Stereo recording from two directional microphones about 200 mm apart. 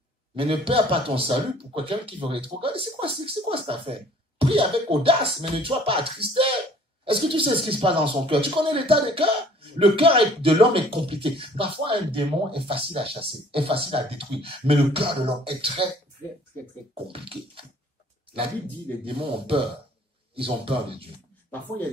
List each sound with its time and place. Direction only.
0.4 s speech: 25° right (ahead or behind)
16.9 s speech: 25° right (ahead or behind)
19.0 s speech: 25° right (ahead or behind)